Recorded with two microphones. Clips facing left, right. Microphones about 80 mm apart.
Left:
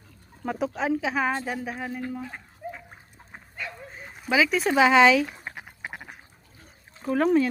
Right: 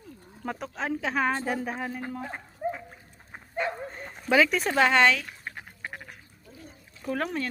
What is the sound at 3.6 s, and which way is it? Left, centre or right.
Dog, right.